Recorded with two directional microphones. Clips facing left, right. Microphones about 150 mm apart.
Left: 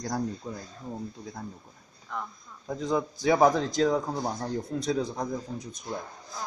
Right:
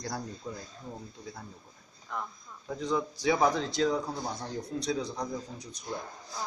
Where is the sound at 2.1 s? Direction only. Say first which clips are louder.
Left 1 dB; 5° right (ahead or behind).